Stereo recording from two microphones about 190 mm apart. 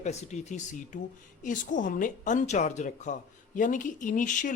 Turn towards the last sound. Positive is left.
turn(degrees=45)  # may be behind; listen again after turning